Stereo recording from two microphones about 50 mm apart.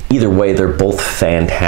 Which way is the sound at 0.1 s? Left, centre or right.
Centre.